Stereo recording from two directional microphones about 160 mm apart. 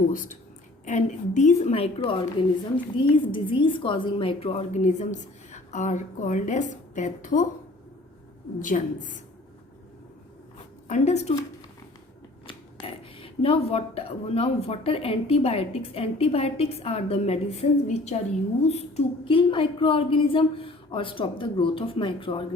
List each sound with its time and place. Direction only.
0.1 s a woman's voice: 55° left (ahead or behind)
8.5 s a woman's voice: 55° left (ahead or behind)
10.8 s a woman's voice: 45° left (ahead or behind)
12.5 s speech: 35° left (ahead or behind)